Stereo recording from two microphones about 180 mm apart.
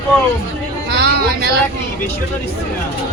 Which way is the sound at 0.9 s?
60° right (ahead or behind).